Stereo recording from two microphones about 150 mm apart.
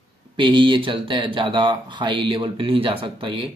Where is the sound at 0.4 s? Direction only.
30° right (ahead or behind).